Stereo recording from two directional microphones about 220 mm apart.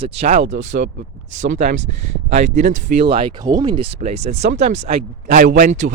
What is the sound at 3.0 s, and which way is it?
Speech, 25° right (ahead or behind).